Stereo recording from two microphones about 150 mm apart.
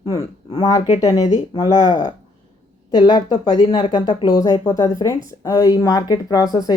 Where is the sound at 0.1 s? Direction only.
25° left (ahead or behind).